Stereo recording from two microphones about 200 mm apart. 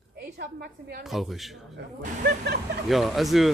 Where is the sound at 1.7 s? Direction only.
55° right (ahead or behind).